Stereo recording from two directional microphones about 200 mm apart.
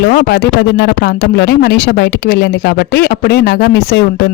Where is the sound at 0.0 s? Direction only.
55° left (ahead or behind).